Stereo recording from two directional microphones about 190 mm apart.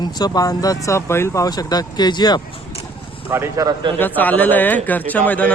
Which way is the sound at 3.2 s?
15° right (ahead or behind).